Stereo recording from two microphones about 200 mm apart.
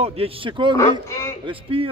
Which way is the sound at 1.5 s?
25° right (ahead or behind).